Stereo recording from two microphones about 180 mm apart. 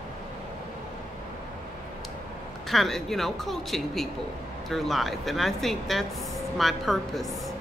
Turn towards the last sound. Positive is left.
turn(degrees=0)  # may be behind; listen again after turning